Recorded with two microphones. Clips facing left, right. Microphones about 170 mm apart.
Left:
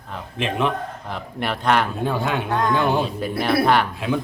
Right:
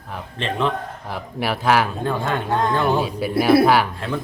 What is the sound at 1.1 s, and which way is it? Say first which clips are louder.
Speech: right 3 dB; 5° right (ahead or behind).